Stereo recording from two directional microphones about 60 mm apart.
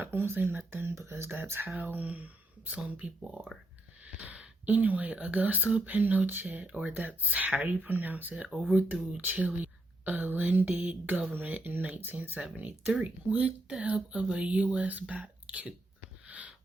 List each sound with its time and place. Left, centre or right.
0.0 s speech: right